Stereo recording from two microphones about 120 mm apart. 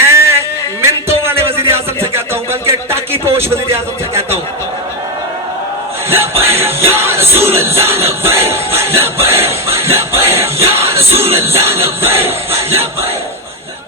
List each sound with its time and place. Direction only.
0.1 s a sound: 20° right (ahead or behind)
1.6 s music: 20° right (ahead or behind)
6.1 s music: 20° right (ahead or behind)